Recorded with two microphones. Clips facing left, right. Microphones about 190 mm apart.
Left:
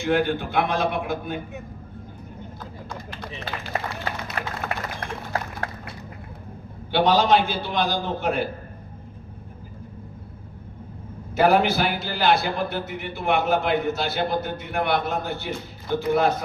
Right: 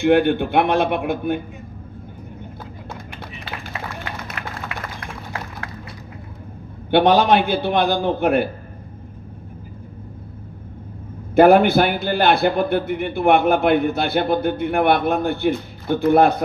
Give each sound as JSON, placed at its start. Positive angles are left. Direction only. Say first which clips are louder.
{"t": 0.0, "sound": "a man's voice", "louder": "right 7 dB", "side_deg": -60}
{"t": 3.7, "sound": "a sound", "louder": "left 3 dB", "side_deg": 40}
{"t": 6.9, "sound": "a man's voice", "louder": "right 4 dB", "side_deg": -55}
{"t": 11.3, "sound": "a man's voice", "louder": "right 7 dB", "side_deg": -55}